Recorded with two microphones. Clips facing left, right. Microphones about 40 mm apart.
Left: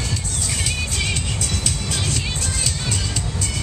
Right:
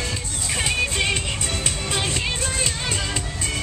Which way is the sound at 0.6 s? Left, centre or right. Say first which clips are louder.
Right 5 dB; right.